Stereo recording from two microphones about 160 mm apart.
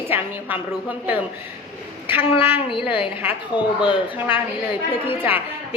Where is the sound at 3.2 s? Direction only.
10° right (ahead or behind).